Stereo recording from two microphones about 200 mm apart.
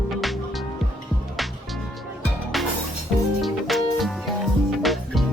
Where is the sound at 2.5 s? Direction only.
Centre (ahead or behind).